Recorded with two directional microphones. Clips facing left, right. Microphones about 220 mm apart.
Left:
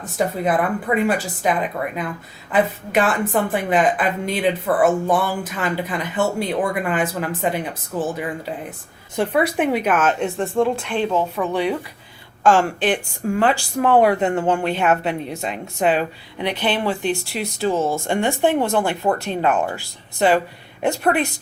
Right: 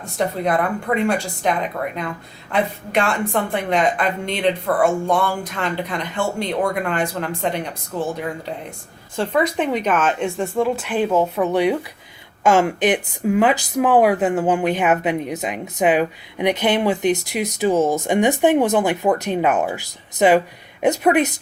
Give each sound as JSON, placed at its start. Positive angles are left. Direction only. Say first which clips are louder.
{"t": 0.0, "sound": "speech", "louder": "even", "side_deg": 5}
{"t": 13.2, "sound": "speech", "louder": "right 2 dB", "side_deg": -5}
{"t": 18.8, "sound": "speech", "louder": "right 2 dB", "side_deg": -10}